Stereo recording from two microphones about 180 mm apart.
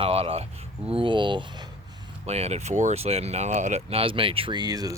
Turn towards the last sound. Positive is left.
turn(degrees=-20)  # may be behind; listen again after turning